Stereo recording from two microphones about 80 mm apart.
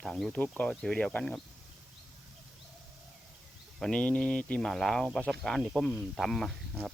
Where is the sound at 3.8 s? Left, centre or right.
Centre.